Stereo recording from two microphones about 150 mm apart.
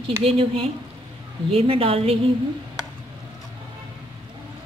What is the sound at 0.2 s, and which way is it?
A woman's voice, 40° right (ahead or behind).